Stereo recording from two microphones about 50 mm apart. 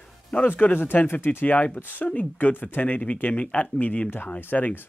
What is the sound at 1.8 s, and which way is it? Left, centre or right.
Speech, left.